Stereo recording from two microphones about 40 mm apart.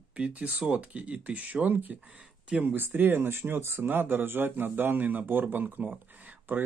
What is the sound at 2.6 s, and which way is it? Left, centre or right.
Speech, right.